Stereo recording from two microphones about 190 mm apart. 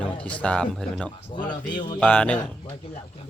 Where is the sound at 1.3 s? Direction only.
25° left (ahead or behind).